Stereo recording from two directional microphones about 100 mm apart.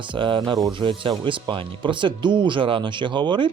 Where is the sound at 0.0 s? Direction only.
55° right (ahead or behind).